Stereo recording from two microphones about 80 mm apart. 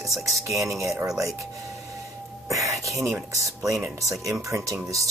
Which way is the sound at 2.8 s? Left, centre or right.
Right.